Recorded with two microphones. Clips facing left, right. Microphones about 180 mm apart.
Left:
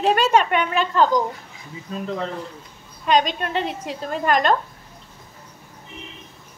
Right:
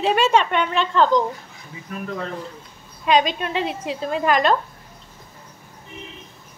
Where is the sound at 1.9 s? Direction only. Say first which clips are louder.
Left 2 dB; 25° left (ahead or behind).